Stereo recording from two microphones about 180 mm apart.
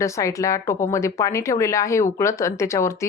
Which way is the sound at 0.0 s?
15° left (ahead or behind).